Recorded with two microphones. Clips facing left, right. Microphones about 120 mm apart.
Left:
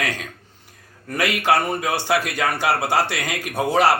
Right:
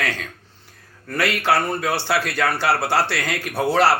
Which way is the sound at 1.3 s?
15° left (ahead or behind).